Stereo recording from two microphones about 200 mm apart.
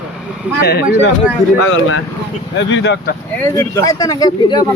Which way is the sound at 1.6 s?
90° left.